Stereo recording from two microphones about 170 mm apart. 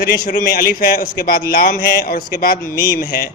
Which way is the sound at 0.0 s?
60° left (ahead or behind).